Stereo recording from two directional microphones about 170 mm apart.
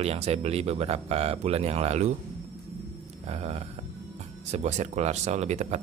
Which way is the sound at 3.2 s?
40° right (ahead or behind).